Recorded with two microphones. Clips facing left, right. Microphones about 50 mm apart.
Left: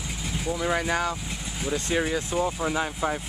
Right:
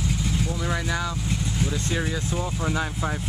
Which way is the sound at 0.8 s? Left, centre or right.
Left.